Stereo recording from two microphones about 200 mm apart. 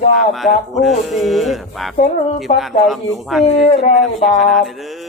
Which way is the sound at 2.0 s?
35° left (ahead or behind).